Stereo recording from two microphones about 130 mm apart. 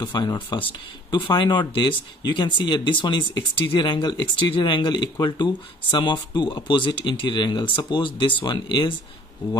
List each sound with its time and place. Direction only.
0.0 s speech: 35° left (ahead or behind)